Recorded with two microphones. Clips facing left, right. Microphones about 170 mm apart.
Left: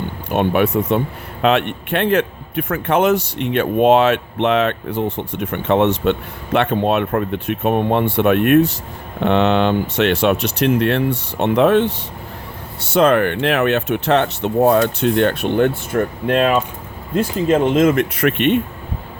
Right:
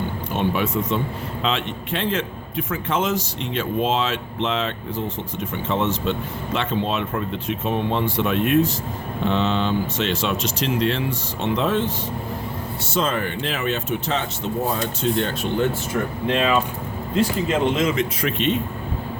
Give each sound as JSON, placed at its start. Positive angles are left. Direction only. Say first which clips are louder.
{"t": 0.3, "sound": "a man's voice", "louder": "left 7 dB", "side_deg": 60}